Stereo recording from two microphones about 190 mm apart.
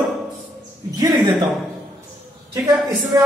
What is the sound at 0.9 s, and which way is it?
Speech, 20° right (ahead or behind).